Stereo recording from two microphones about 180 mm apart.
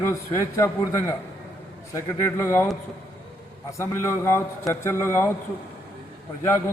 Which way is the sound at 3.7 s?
15° left (ahead or behind).